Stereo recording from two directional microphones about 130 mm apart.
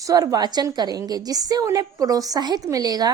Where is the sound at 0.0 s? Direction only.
25° right (ahead or behind).